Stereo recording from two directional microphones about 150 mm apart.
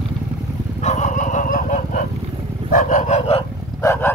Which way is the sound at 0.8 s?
50° left (ahead or behind).